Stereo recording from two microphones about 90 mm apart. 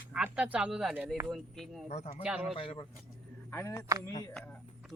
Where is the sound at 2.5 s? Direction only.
90° left.